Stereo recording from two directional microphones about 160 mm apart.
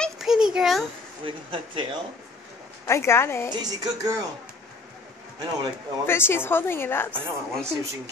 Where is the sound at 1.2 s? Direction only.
35° right (ahead or behind).